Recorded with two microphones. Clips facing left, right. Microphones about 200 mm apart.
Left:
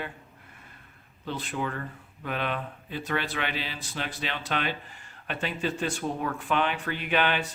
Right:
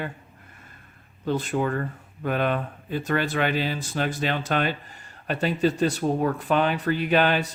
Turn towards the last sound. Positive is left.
turn(degrees=-40)  # may be behind; listen again after turning